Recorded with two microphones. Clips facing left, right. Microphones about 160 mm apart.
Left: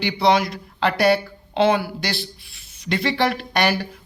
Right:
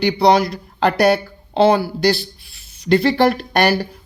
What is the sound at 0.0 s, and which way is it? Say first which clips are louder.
Speech: right 4 dB; 40° right (ahead or behind).